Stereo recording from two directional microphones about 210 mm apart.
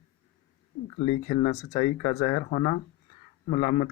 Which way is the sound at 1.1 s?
25° left (ahead or behind).